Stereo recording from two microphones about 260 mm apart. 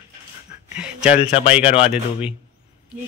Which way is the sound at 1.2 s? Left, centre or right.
Left.